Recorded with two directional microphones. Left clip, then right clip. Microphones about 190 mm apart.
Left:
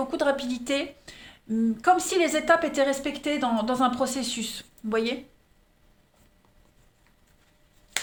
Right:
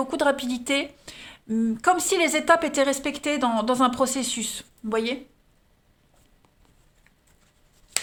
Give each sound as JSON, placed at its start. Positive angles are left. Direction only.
{"t": 0.0, "sound": "a woman's voice", "side_deg": -40}